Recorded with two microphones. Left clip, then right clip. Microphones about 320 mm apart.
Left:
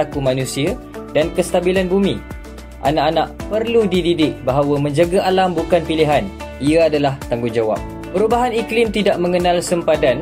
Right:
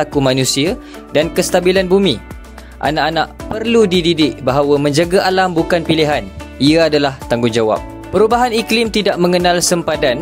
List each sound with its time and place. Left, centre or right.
0.0 s speech: right